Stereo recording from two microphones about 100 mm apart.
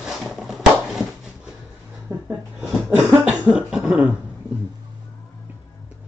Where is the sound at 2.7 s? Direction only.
10° right (ahead or behind).